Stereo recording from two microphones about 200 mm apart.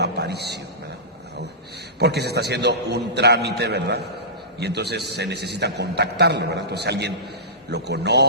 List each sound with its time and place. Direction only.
0.0 s a man's voice: 55° right (ahead or behind)
2.0 s a man's voice: 55° right (ahead or behind)